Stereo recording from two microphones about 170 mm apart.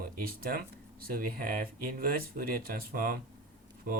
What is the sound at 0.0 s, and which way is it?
Speech, 60° right (ahead or behind).